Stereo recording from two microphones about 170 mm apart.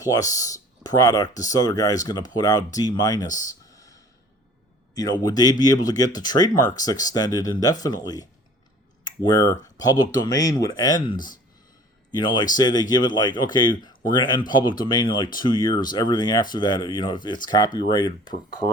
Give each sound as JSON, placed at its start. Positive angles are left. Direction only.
{"t": 0.0, "sound": "speech", "side_deg": 20}
{"t": 4.9, "sound": "speech", "side_deg": 25}